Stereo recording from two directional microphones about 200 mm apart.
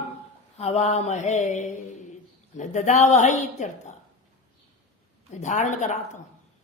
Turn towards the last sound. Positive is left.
turn(degrees=35)  # may be behind; listen again after turning